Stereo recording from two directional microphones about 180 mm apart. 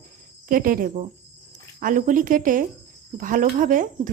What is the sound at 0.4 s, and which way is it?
Speech, 50° right (ahead or behind).